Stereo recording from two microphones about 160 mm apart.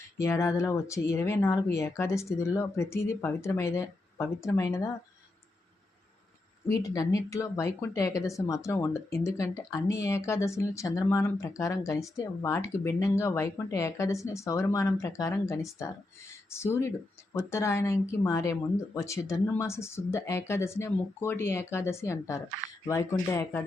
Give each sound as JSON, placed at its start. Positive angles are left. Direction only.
{"t": 0.2, "sound": "speech", "side_deg": 20}
{"t": 6.7, "sound": "speech", "side_deg": 20}